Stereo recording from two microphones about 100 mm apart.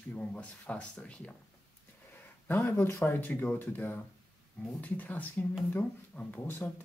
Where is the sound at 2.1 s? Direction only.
20° left (ahead or behind).